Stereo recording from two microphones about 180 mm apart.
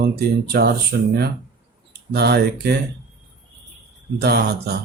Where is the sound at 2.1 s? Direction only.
65° right (ahead or behind).